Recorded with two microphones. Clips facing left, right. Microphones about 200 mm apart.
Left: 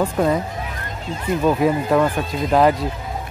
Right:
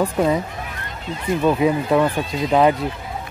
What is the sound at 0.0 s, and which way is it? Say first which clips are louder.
Speech: even; centre (ahead or behind).